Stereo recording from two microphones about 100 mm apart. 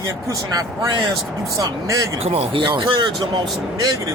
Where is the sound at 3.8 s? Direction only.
35° right (ahead or behind).